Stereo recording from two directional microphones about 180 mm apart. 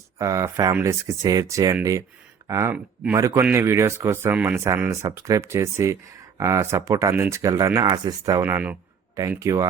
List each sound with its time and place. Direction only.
0.2 s speech: 20° right (ahead or behind)
2.7 s speech: 5° right (ahead or behind)
3.2 s speech: 15° right (ahead or behind)